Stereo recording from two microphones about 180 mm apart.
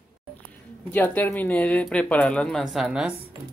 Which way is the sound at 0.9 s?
10° left (ahead or behind).